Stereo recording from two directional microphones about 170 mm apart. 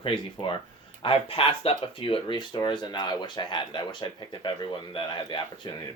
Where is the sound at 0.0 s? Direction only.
30° left (ahead or behind).